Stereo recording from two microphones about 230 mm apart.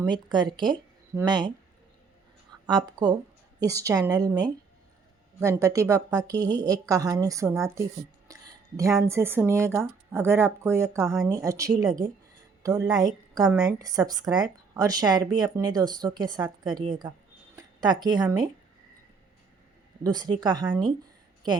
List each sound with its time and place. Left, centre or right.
0.1 s speech: centre
2.6 s speech: centre
20.1 s speech: centre